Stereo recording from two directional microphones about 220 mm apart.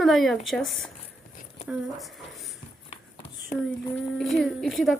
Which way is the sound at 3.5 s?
35° left (ahead or behind).